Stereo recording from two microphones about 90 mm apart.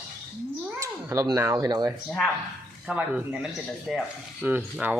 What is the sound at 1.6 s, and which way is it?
Speech, 45° right (ahead or behind).